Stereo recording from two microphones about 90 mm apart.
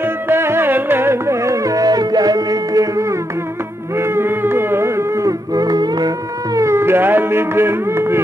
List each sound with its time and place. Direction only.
0.0 s carnatic music: 25° right (ahead or behind)
3.9 s music: 30° right (ahead or behind)